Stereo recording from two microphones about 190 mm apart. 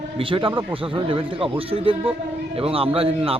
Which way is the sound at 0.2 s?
30° right (ahead or behind).